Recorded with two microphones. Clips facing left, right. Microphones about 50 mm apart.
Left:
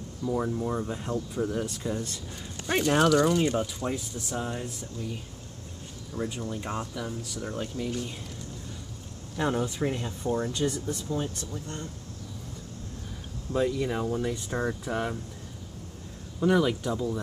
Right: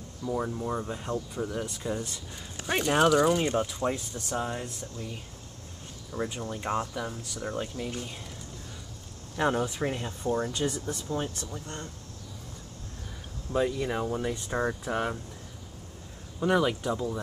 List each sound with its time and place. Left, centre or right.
0.2 s speech: centre
6.3 s speech: centre
9.4 s speech: centre
11.1 s speech: centre
11.6 s speech: right
13.5 s speech: centre
16.3 s speech: centre